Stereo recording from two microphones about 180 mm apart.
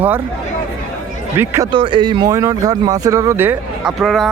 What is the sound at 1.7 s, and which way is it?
Speech, 30° right (ahead or behind).